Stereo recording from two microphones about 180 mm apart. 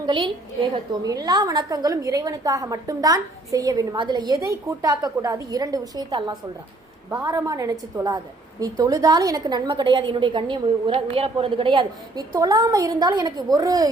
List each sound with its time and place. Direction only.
0.0 s a woman's voice: 25° right (ahead or behind)